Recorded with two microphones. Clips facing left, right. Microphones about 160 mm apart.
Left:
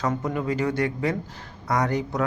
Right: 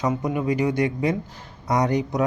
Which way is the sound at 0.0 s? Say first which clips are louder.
Right 2 dB; 15° right (ahead or behind).